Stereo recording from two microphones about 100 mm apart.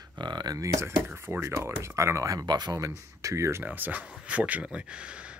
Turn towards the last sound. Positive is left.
turn(degrees=-10)  # may be behind; listen again after turning